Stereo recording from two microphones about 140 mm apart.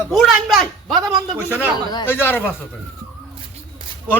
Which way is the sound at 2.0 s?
15° left (ahead or behind).